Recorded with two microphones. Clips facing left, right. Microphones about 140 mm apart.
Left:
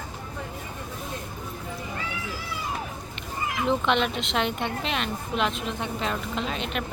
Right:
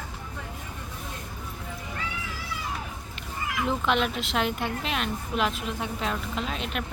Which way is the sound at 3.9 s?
5° right (ahead or behind).